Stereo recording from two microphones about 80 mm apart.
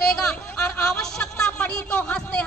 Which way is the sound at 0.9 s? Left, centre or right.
Centre.